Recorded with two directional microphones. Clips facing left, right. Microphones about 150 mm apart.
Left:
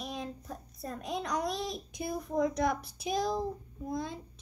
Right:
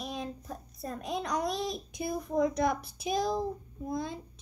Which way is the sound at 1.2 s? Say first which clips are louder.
Right 2 dB; 15° right (ahead or behind).